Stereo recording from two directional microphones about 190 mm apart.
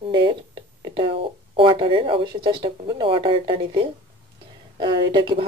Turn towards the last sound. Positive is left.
turn(degrees=-25)  # may be behind; listen again after turning